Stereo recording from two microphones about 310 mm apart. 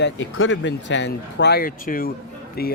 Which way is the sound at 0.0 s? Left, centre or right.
Left.